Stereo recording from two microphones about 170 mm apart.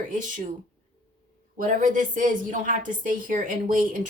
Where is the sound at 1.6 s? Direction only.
50° right (ahead or behind).